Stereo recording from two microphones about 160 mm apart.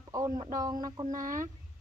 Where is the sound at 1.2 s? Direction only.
55° right (ahead or behind).